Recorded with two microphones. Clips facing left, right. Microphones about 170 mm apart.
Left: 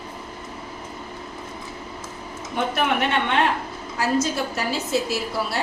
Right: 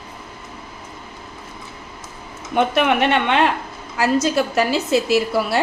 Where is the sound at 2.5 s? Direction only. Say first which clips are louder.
Right 6 dB; 85° right.